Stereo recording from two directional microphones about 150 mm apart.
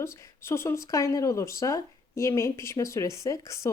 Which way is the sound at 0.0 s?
15° left (ahead or behind).